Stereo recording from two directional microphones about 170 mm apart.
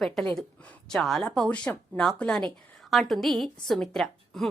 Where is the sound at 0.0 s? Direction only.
5° left (ahead or behind).